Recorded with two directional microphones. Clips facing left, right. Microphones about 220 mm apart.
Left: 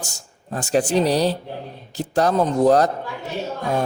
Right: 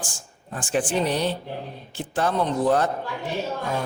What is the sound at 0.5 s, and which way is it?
A man's voice, 40° left (ahead or behind).